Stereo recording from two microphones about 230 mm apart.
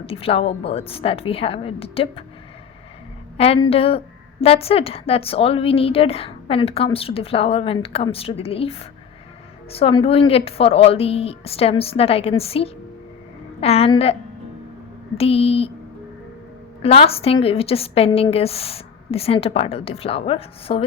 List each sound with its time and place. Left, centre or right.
0.0 s a woman's voice: left
3.3 s a woman's voice: left
9.7 s a woman's voice: left
15.2 s a woman's voice: left
16.8 s a woman's voice: left